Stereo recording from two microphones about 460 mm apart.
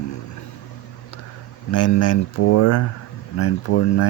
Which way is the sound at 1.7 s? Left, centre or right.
Left.